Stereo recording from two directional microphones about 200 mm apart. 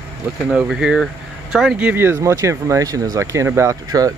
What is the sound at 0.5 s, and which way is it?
Speech, centre (ahead or behind).